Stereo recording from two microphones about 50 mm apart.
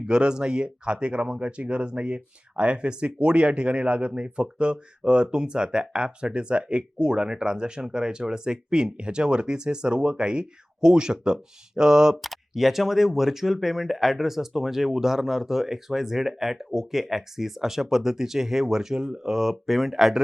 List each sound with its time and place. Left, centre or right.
0.0 s speech: centre
12.2 s speech: centre